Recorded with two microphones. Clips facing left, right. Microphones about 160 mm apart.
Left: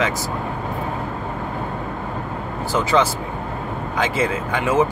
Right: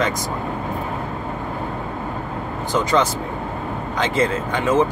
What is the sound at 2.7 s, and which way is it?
Speech, 5° left (ahead or behind).